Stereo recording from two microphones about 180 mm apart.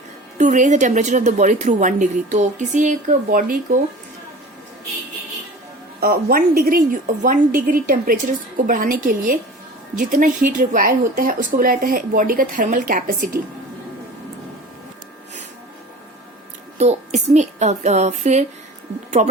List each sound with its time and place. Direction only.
0.3 s a woman's voice: 45° right (ahead or behind)
6.0 s a woman's voice: 55° right (ahead or behind)
16.7 s a child's voice: 40° right (ahead or behind)